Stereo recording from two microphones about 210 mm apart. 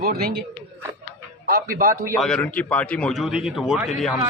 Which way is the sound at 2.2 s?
5° left (ahead or behind).